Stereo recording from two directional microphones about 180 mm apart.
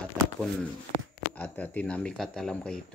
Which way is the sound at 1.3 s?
10° left (ahead or behind).